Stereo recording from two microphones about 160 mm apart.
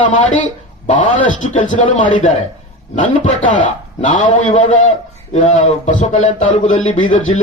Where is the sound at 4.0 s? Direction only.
50° left (ahead or behind).